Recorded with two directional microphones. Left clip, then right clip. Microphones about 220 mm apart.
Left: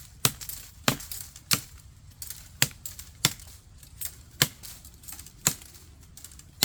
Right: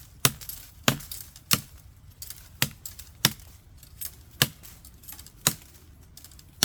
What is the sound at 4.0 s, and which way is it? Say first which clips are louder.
Typewriter: right 1 dB; 5° right (ahead or behind).